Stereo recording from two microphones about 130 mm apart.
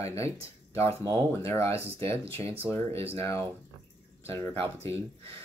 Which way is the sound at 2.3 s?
45° right (ahead or behind).